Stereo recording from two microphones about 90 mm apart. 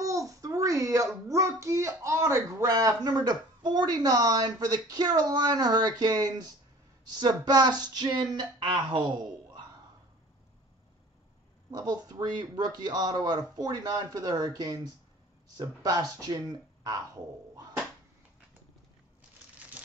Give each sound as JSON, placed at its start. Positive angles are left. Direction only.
{"t": 0.0, "sound": "speech", "side_deg": -35}
{"t": 11.7, "sound": "speech", "side_deg": -45}
{"t": 16.8, "sound": "a sound", "side_deg": -40}